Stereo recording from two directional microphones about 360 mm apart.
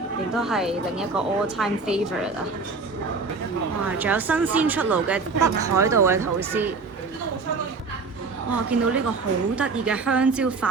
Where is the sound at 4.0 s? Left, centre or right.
Centre.